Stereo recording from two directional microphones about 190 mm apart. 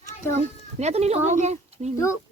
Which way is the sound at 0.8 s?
35° right (ahead or behind).